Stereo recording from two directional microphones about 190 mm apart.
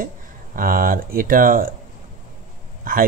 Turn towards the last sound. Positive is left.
turn(degrees=-45)  # may be behind; listen again after turning